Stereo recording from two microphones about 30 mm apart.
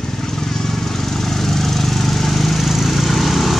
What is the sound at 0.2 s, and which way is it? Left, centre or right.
Vehicle, centre.